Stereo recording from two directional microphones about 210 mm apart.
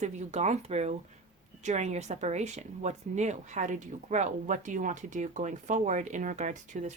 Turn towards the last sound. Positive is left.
turn(degrees=-35)  # may be behind; listen again after turning